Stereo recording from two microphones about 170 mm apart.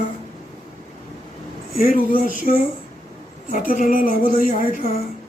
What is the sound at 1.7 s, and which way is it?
Speech, 55° left (ahead or behind).